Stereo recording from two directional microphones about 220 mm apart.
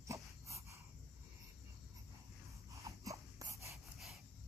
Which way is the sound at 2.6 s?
15° right (ahead or behind).